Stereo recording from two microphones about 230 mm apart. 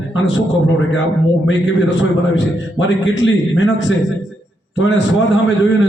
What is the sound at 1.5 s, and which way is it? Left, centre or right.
A man's voice, left.